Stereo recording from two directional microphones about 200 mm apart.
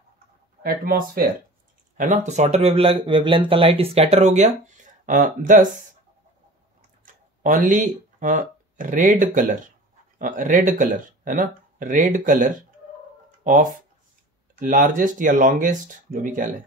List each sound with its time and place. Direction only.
0.6 s speech: 45° right (ahead or behind)
2.0 s speech: 35° right (ahead or behind)
7.4 s speech: 40° right (ahead or behind)
13.4 s a sound: 40° right (ahead or behind)
14.6 s speech: 40° right (ahead or behind)